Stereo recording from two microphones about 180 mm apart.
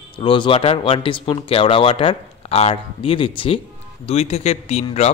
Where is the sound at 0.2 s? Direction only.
30° left (ahead or behind).